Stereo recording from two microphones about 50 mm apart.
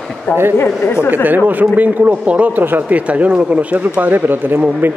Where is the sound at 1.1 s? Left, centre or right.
Right.